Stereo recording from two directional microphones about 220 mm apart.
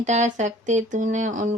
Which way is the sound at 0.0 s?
35° right (ahead or behind).